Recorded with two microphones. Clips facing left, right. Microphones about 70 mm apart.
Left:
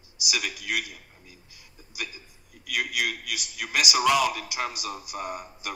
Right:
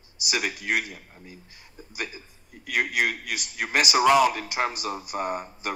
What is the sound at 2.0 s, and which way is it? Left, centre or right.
A man's voice, right.